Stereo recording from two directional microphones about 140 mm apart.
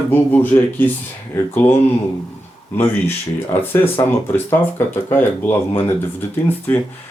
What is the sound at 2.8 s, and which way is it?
Speech, 15° left (ahead or behind).